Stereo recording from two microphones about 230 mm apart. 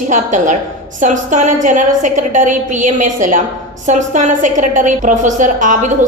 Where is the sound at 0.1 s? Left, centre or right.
Right.